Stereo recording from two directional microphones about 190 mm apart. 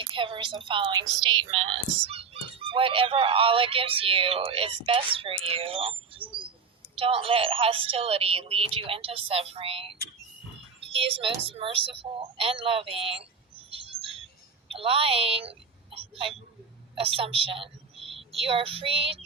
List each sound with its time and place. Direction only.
0.0 s a woman's voice: 25° right (ahead or behind)
17.0 s a sound: 30° right (ahead or behind)
18.4 s a woman's voice: 30° right (ahead or behind)